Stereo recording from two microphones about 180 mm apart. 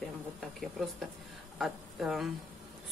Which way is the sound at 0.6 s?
Centre (ahead or behind).